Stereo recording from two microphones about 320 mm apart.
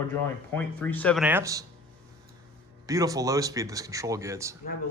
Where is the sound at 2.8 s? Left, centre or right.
Centre.